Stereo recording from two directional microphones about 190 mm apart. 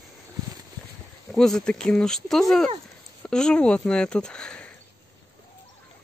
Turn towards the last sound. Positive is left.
turn(degrees=5)  # may be behind; listen again after turning